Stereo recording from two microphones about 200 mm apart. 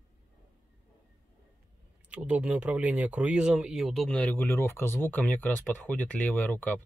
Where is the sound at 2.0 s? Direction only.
5° right (ahead or behind).